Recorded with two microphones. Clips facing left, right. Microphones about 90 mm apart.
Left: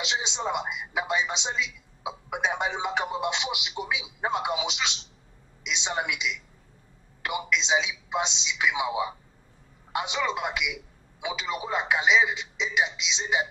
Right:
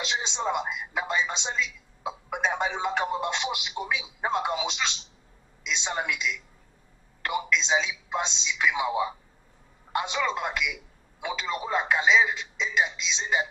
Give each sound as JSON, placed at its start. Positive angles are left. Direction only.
{"t": 0.0, "sound": "a woman's voice", "side_deg": 10}